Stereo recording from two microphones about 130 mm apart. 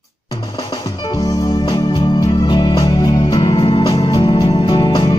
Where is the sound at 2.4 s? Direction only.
35° left (ahead or behind).